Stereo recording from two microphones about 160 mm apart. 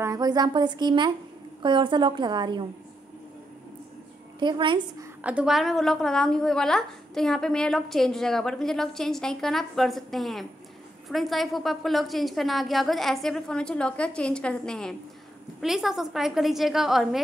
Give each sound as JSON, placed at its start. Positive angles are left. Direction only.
{"t": 0.0, "sound": "a woman's voice", "side_deg": -25}
{"t": 4.4, "sound": "a woman's voice", "side_deg": -30}
{"t": 5.2, "sound": "a woman's voice", "side_deg": -5}